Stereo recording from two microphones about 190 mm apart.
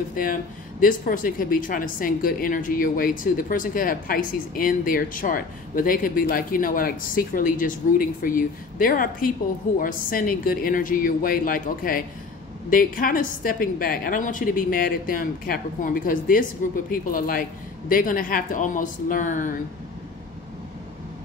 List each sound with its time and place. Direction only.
0.1 s speech: 45° left (ahead or behind)